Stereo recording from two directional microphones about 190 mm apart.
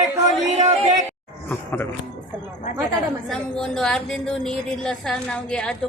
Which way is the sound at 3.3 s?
5° left (ahead or behind).